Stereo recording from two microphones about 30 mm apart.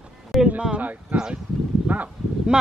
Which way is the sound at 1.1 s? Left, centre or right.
Right.